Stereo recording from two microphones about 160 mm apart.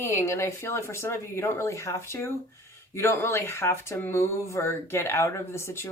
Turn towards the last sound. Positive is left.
turn(degrees=15)  # may be behind; listen again after turning